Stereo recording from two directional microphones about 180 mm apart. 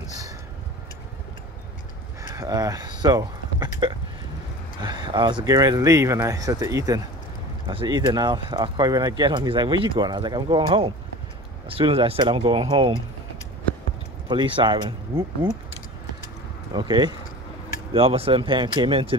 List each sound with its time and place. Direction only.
2.3 s speech: 20° right (ahead or behind)
14.2 s speech: 25° right (ahead or behind)
16.7 s speech: 25° right (ahead or behind)